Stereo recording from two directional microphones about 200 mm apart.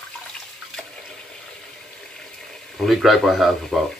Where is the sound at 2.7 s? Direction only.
Centre (ahead or behind).